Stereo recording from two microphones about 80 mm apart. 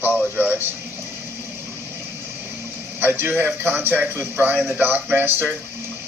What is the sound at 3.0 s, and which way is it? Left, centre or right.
A man's voice, right.